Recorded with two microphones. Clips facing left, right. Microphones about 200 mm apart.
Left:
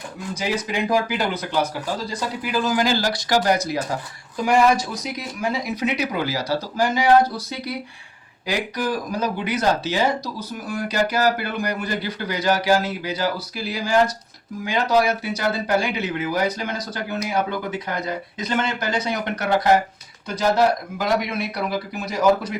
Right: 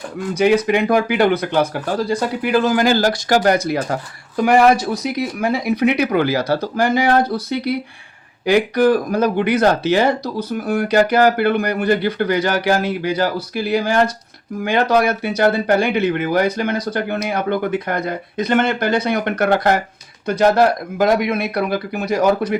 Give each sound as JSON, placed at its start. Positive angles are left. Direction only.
{"t": 0.3, "sound": "speech", "side_deg": -60}